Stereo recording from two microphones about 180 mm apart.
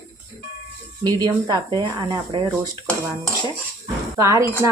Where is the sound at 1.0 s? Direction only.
25° right (ahead or behind).